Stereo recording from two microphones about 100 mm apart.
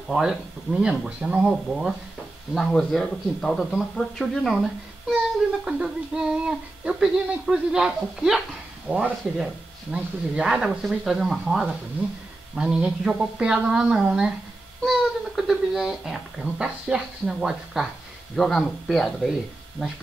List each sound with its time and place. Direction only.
0.1 s music: 5° right (ahead or behind)
2.5 s speech: 5° left (ahead or behind)
5.7 s music: 10° right (ahead or behind)
8.8 s speech: 10° right (ahead or behind)
12.0 s music: 15° right (ahead or behind)
14.9 s speech: 5° right (ahead or behind)
19.8 s music: 10° right (ahead or behind)